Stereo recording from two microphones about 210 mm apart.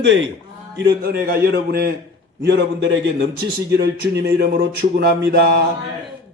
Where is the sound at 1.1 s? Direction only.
45° right (ahead or behind).